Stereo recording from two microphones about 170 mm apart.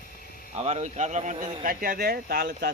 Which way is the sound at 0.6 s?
40° right (ahead or behind).